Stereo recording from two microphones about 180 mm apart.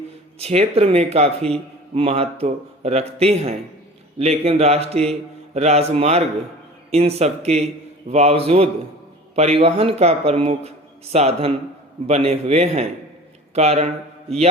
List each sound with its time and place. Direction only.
0.3 s speech: 35° right (ahead or behind)